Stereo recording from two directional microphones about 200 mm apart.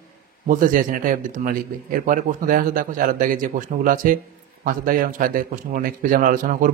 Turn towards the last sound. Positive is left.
turn(degrees=-40)  # may be behind; listen again after turning